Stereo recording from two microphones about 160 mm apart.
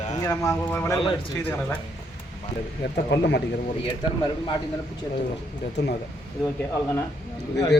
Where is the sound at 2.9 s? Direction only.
90° left.